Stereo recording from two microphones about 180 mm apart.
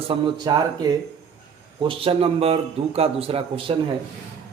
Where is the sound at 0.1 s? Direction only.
20° right (ahead or behind).